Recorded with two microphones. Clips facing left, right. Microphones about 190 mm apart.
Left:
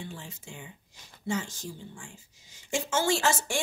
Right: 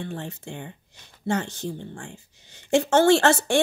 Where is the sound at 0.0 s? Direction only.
60° right (ahead or behind).